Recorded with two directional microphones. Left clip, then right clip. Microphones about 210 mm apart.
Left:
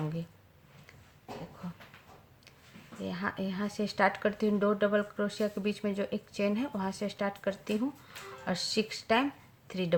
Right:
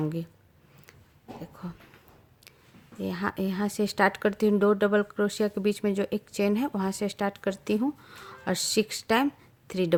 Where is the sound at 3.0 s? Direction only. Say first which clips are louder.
Right 5 dB; 50° right (ahead or behind).